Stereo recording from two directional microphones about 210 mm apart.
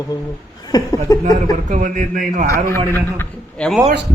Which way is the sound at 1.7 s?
40° right (ahead or behind).